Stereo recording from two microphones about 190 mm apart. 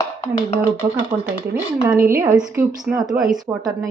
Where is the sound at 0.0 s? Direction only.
20° left (ahead or behind).